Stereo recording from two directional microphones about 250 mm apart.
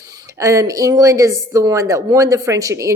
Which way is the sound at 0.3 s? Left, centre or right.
Centre.